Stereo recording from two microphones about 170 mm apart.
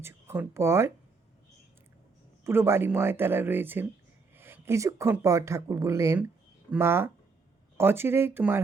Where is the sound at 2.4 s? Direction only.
15° right (ahead or behind).